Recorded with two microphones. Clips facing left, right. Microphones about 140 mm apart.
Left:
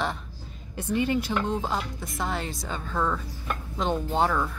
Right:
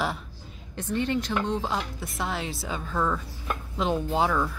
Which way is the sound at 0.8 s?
10° left (ahead or behind).